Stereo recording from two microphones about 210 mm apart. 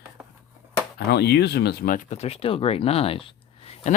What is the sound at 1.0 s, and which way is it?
Speech, 50° left (ahead or behind).